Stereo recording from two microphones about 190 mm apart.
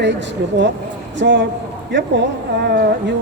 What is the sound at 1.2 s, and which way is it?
Speech, 70° right (ahead or behind).